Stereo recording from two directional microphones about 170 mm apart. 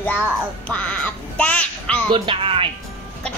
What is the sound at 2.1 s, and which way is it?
Speech, 30° right (ahead or behind).